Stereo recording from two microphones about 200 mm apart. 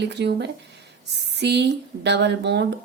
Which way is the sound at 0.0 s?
60° right (ahead or behind).